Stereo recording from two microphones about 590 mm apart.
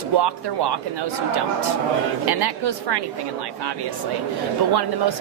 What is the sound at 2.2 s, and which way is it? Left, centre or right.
Speech, right.